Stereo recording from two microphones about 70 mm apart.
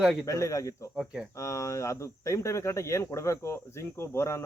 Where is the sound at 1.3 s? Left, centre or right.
Left.